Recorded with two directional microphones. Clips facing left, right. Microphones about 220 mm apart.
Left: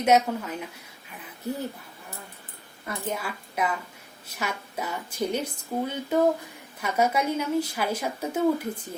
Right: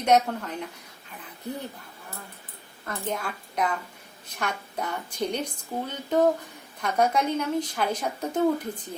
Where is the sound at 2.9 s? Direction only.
5° left (ahead or behind).